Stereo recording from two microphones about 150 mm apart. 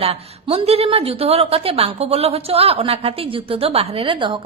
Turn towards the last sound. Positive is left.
turn(degrees=-35)  # may be behind; listen again after turning